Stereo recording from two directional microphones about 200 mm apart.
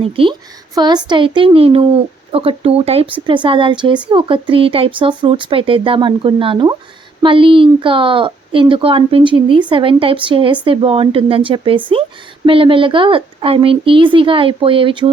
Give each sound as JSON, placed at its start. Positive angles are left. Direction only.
{"t": 0.0, "sound": "speech", "side_deg": -25}